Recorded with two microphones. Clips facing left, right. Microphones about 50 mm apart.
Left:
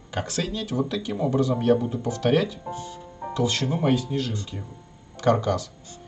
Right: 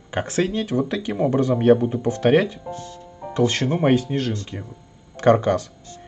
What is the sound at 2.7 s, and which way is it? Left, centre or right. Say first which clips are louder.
Speech: right 1 dB; centre.